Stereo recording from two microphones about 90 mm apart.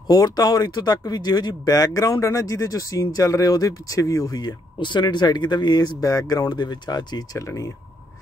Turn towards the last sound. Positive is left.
turn(degrees=40)  # may be behind; listen again after turning